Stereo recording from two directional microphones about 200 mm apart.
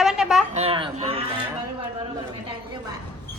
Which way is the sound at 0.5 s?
30° right (ahead or behind).